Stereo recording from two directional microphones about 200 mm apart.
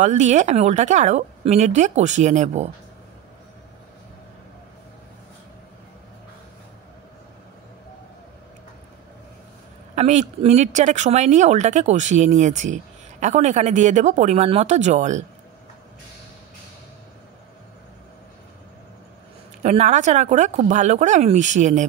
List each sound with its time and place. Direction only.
0.0 s speech: 35° right (ahead or behind)
9.9 s speech: 35° right (ahead or behind)
19.6 s speech: 35° right (ahead or behind)